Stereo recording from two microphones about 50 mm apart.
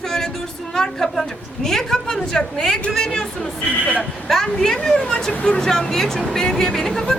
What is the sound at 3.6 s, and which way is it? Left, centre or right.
Speech, left.